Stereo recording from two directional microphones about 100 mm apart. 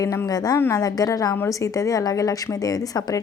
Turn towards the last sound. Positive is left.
turn(degrees=40)  # may be behind; listen again after turning